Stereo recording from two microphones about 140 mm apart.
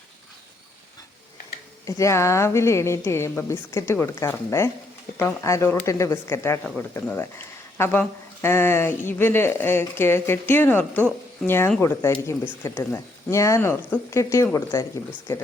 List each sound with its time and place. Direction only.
1.8 s speech: 20° left (ahead or behind)